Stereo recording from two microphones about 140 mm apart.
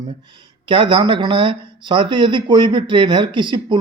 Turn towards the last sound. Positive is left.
turn(degrees=-35)  # may be behind; listen again after turning